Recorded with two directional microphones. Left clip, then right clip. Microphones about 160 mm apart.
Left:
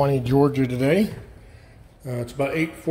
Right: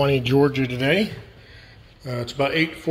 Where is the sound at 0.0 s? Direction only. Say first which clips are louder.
Right 1 dB; 15° left (ahead or behind).